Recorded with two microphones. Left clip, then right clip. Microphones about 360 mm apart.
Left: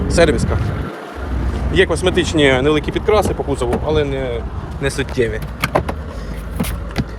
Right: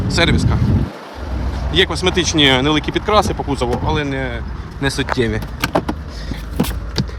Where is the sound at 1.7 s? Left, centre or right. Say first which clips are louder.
Left 1 dB; centre.